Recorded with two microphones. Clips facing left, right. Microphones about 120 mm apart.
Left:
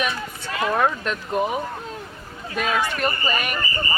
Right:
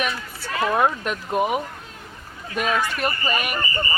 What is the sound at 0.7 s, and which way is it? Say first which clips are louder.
Speech: even; 10° right (ahead or behind).